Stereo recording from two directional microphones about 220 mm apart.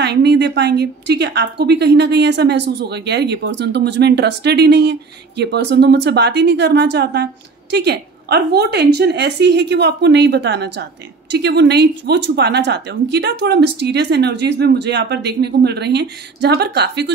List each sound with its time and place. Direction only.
0.0 s a woman's voice: 50° right (ahead or behind)